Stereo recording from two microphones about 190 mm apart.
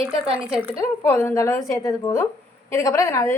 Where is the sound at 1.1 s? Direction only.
10° left (ahead or behind).